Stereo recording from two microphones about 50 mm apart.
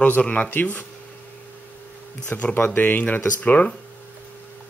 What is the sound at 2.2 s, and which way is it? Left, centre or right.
Speech, left.